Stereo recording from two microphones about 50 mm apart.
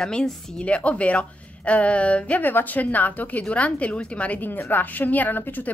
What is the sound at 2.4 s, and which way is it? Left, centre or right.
A woman's voice, left.